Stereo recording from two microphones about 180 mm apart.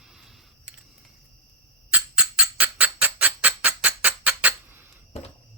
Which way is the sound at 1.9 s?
5° right (ahead or behind).